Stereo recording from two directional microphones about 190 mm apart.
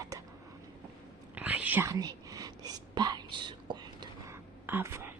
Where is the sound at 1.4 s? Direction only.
10° right (ahead or behind).